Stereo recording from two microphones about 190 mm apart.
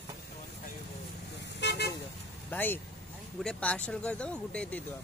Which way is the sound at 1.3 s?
65° left (ahead or behind).